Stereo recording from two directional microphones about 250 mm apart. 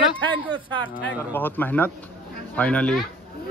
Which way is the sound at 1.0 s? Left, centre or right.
Centre.